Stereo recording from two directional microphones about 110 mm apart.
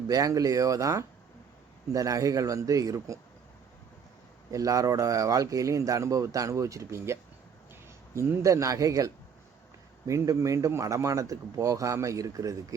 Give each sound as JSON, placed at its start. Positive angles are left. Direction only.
{"t": 0.1, "sound": "speech", "side_deg": -30}
{"t": 4.5, "sound": "speech", "side_deg": -30}